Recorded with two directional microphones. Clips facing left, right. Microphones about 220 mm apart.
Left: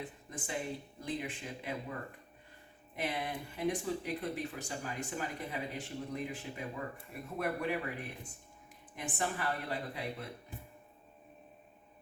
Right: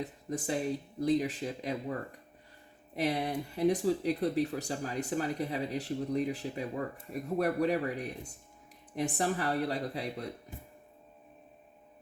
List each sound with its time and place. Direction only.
0.0 s speech: 40° right (ahead or behind)
2.9 s speech: 40° right (ahead or behind)